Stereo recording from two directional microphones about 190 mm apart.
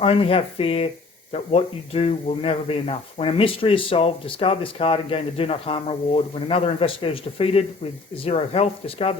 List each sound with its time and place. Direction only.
0.0 s speech: 30° left (ahead or behind)